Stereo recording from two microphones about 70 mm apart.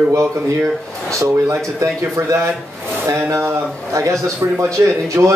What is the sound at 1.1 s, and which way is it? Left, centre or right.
Speech, right.